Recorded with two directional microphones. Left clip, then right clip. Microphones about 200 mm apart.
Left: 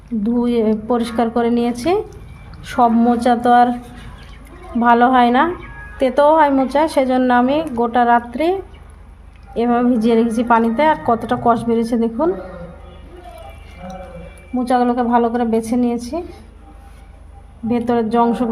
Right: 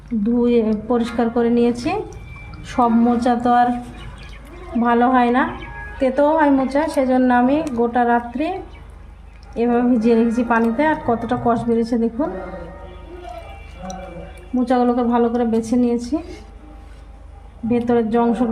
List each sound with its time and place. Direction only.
0.2 s a woman's voice: 50° left (ahead or behind)
4.8 s a woman's voice: 50° left (ahead or behind)
9.6 s a woman's voice: 50° left (ahead or behind)
14.6 s a woman's voice: 45° left (ahead or behind)
17.7 s a woman's voice: 50° left (ahead or behind)